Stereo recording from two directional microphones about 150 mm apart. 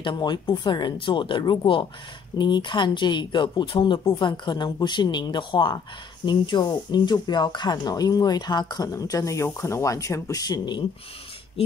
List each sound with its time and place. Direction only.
0.0 s speech: 30° left (ahead or behind)